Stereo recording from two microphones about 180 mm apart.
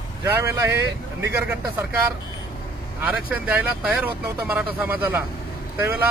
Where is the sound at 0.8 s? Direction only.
70° right (ahead or behind).